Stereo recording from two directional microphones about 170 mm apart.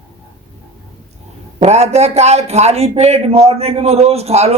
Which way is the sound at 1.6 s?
40° right (ahead or behind).